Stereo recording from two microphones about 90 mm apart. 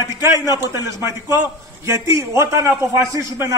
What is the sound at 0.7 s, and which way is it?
A man's voice, 35° right (ahead or behind).